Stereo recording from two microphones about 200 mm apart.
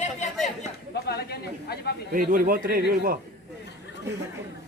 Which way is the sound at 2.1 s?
45° right (ahead or behind).